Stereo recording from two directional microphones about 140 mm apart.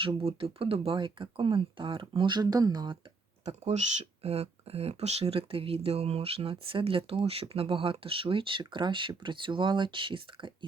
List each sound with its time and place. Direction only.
0.0 s speech: 40° right (ahead or behind)
3.4 s speech: 50° right (ahead or behind); by 10.7 s 35° right (ahead or behind)